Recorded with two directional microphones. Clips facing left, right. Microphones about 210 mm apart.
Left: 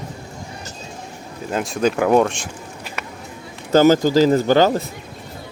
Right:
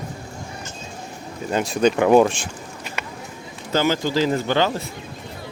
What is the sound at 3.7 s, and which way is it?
Speech, 45° left (ahead or behind).